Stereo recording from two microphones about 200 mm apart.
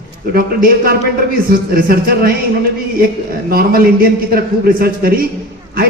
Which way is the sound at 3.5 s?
50° right (ahead or behind).